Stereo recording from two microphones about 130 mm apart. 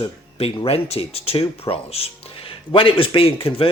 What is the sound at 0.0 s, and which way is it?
Speech, 45° left (ahead or behind).